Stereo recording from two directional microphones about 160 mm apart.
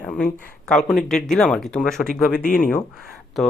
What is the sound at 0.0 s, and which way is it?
Speech, 5° left (ahead or behind).